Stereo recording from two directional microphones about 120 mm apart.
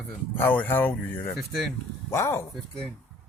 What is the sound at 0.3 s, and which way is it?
Speech, 15° left (ahead or behind).